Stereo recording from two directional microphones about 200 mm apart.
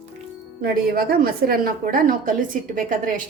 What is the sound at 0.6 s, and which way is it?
A woman's voice, 50° right (ahead or behind).